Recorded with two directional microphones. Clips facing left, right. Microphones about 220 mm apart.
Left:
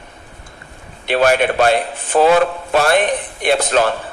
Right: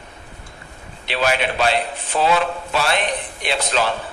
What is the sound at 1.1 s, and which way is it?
A man's voice, 50° left (ahead or behind).